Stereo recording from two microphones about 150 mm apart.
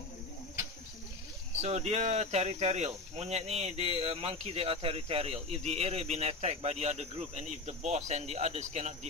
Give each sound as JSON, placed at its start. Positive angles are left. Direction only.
{"t": 1.6, "sound": "speech", "side_deg": -45}